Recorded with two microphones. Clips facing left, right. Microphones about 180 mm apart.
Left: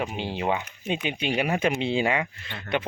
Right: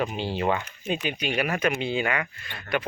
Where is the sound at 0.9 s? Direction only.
25° left (ahead or behind).